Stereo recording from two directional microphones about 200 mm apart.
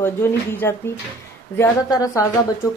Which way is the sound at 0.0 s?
10° left (ahead or behind).